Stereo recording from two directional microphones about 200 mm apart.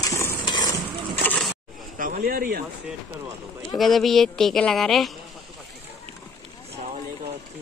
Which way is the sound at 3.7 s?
Centre (ahead or behind).